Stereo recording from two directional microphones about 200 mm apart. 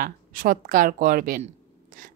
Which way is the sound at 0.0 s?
45° right (ahead or behind).